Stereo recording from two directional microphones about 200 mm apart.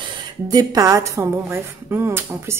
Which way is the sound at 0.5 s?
20° right (ahead or behind).